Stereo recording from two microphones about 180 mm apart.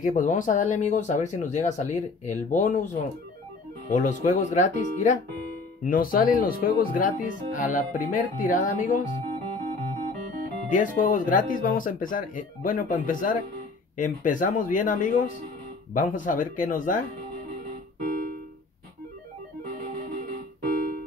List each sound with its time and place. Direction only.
0.0 s speech: 45° left (ahead or behind)
3.9 s speech: 45° left (ahead or behind)
10.7 s speech: 45° left (ahead or behind)
18.0 s music: 55° right (ahead or behind)
20.6 s music: 50° right (ahead or behind)